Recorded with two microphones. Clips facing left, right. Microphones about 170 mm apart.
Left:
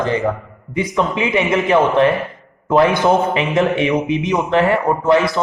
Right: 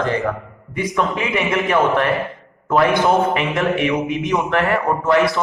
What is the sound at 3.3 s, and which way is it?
A man's voice, 25° left (ahead or behind).